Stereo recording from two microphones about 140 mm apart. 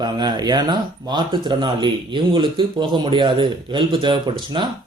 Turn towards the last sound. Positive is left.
turn(degrees=-35)  # may be behind; listen again after turning